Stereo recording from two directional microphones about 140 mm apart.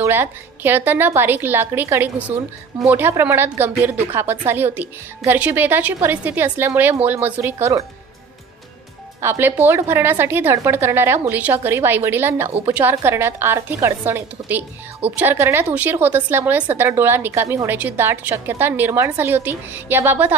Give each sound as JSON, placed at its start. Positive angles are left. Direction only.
{"t": 0.0, "sound": "a woman's voice", "side_deg": -15}
{"t": 9.2, "sound": "a woman's voice", "side_deg": -15}